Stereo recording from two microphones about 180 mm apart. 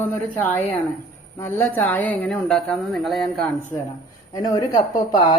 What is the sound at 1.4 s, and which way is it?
Speech, 15° left (ahead or behind).